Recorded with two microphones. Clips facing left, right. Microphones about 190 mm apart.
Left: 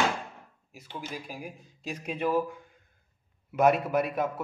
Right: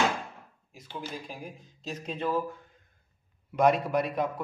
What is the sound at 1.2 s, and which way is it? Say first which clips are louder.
A man's voice: left 1 dB; 10° left (ahead or behind).